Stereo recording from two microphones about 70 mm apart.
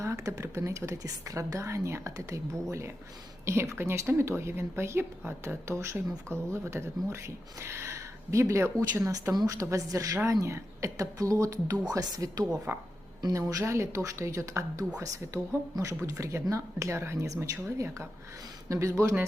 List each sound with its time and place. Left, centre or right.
0.0 s a woman's voice: right
11.9 s speech: right
12.7 s speech: right
13.3 s a woman's voice: right